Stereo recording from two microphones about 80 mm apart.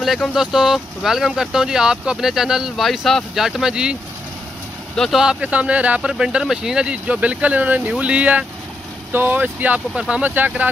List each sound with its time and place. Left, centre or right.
0.0 s speech: centre
4.9 s speech: centre
5.2 s speech: centre